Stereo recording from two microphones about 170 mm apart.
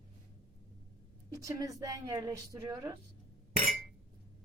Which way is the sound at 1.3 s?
20° right (ahead or behind).